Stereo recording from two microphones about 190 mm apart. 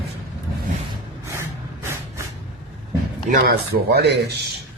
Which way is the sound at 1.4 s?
15° right (ahead or behind).